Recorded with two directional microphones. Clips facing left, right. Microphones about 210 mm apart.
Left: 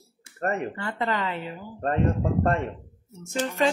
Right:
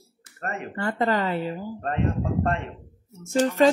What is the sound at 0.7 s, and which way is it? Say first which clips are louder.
Speech: right 4 dB; 45° right (ahead or behind).